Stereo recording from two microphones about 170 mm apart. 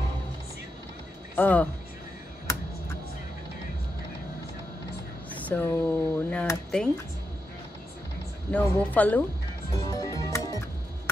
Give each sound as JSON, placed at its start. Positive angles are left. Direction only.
{"t": 1.3, "sound": "speech", "side_deg": 10}
{"t": 5.5, "sound": "speech", "side_deg": 10}
{"t": 8.5, "sound": "speech", "side_deg": 10}
{"t": 9.8, "sound": "music", "side_deg": 20}